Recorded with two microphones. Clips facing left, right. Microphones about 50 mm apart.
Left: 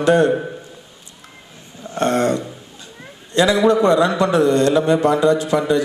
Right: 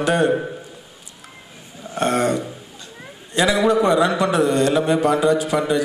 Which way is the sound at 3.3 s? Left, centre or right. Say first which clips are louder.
Left 2 dB; centre.